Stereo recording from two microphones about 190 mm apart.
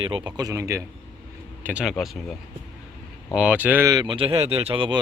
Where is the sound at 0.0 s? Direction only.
25° right (ahead or behind).